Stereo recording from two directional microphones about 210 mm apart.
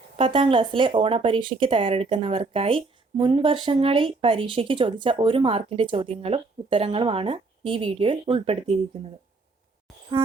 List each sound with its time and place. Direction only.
0.2 s speech: 25° right (ahead or behind)